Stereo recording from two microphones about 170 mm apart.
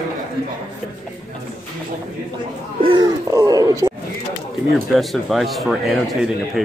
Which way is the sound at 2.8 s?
30° right (ahead or behind).